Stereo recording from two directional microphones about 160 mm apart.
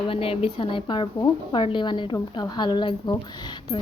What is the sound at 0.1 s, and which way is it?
A woman's voice, 35° left (ahead or behind).